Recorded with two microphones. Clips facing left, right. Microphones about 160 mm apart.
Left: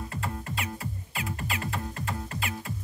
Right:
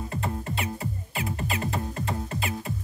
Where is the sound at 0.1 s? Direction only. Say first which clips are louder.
Right 4 dB; 25° right (ahead or behind).